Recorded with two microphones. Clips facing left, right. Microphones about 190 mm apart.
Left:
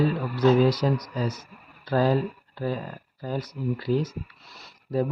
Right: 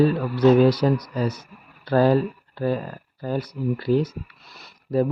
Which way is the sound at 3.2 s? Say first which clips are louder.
Right 4 dB; 65° right (ahead or behind).